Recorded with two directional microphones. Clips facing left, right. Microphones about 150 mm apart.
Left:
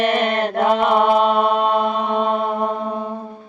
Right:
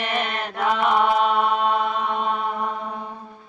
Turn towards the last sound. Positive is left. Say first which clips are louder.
# left 7 dB
turn(degrees=35)  # may be behind; listen again after turning